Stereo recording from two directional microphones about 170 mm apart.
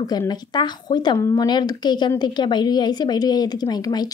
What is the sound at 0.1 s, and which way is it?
Speech, 25° left (ahead or behind).